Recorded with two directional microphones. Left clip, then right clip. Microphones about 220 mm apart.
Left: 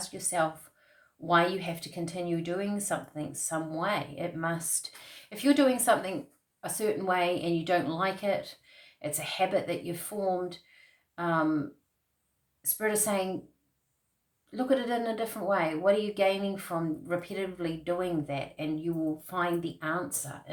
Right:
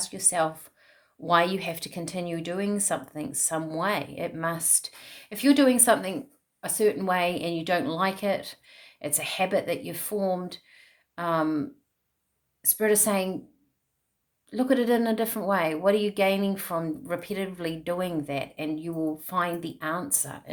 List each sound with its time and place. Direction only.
0.0 s a woman's voice: 45° right (ahead or behind)
12.6 s a woman's voice: 45° right (ahead or behind)
14.5 s a woman's voice: 45° right (ahead or behind)